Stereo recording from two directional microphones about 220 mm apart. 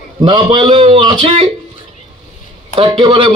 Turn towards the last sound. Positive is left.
turn(degrees=-25)  # may be behind; listen again after turning